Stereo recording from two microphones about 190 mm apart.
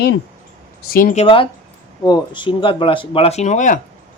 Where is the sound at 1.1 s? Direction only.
30° left (ahead or behind).